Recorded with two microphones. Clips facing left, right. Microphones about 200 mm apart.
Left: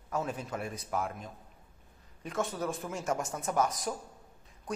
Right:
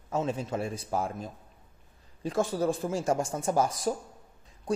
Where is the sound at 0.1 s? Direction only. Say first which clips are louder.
Right 5 dB; 25° right (ahead or behind).